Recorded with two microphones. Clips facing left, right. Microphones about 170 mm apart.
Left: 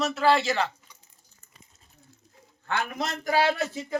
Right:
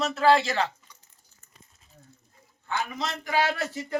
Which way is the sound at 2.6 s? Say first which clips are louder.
Left 1 dB; 65° left (ahead or behind).